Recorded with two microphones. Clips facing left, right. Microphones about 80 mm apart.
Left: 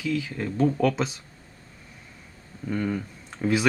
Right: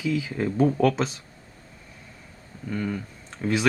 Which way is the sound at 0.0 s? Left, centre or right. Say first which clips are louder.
Right 2 dB; centre.